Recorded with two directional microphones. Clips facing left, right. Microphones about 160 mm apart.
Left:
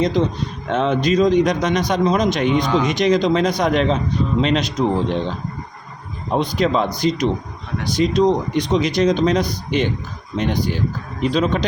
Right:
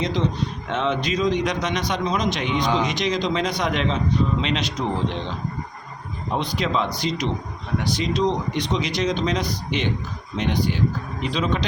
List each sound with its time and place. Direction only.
0.7 s speech: 40° left (ahead or behind)
6.3 s speech: 45° left (ahead or behind)